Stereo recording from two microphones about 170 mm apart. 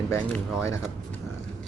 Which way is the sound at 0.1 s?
15° left (ahead or behind).